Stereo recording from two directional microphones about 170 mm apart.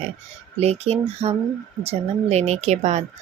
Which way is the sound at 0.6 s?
40° right (ahead or behind).